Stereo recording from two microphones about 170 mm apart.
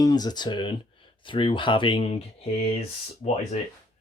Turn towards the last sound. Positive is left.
turn(degrees=40)  # may be behind; listen again after turning